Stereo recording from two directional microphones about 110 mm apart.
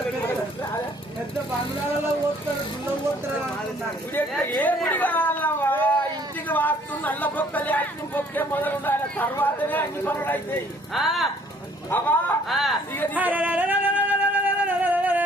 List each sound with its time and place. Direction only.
4.1 s a sound: 20° left (ahead or behind)
9.4 s speech: 15° left (ahead or behind)
10.9 s speech: centre (ahead or behind)
11.9 s a sound: 20° left (ahead or behind)
12.5 s speech: centre (ahead or behind)
13.1 s singing: 15° right (ahead or behind)